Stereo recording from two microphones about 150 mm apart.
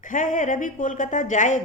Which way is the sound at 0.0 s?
60° left (ahead or behind).